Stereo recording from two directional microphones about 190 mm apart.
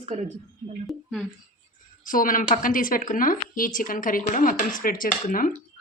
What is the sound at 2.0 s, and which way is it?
Speech, 45° left (ahead or behind).